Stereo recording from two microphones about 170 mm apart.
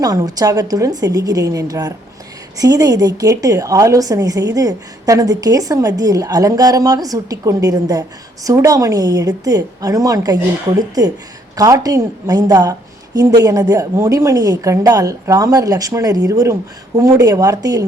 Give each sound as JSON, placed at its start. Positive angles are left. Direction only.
{"t": 0.0, "sound": "a woman's voice", "side_deg": -20}